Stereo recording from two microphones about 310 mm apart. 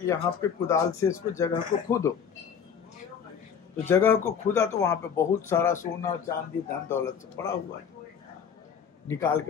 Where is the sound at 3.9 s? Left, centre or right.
Centre.